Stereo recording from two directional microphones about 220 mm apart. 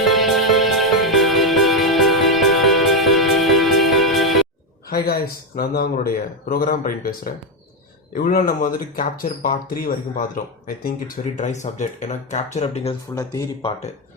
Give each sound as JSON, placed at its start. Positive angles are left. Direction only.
{"t": 0.0, "sound": "music", "side_deg": 0}
{"t": 4.9, "sound": "speech", "side_deg": 45}